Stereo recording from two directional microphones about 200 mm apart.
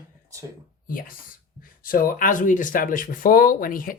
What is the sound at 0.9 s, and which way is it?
Speech, 45° left (ahead or behind).